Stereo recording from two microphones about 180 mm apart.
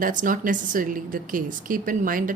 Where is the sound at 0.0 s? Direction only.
45° right (ahead or behind).